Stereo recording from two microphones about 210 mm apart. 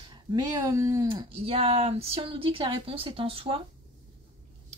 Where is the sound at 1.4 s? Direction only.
30° right (ahead or behind).